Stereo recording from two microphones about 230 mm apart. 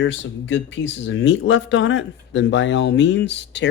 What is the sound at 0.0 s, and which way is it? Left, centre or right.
Speech, left.